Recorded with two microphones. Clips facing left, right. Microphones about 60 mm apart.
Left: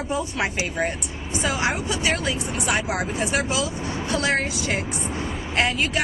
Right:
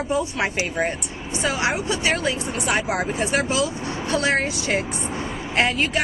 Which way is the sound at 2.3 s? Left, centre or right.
Centre.